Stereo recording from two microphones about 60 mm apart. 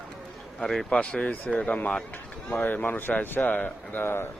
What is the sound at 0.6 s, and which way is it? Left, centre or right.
Speech, centre.